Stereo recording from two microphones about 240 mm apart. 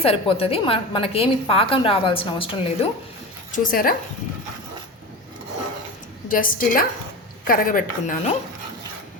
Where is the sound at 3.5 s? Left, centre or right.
Left.